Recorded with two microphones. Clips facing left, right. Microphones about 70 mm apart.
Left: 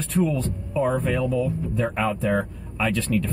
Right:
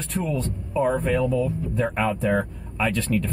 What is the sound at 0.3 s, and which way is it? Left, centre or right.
Speech, centre.